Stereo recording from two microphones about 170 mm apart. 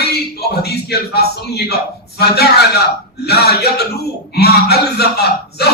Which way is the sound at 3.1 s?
70° left (ahead or behind).